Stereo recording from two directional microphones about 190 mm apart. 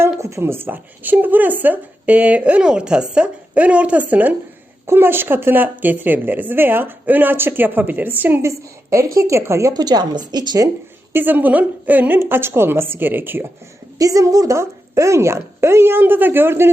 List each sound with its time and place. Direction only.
0.0 s a woman's voice: 15° right (ahead or behind)
11.1 s speech: 10° right (ahead or behind)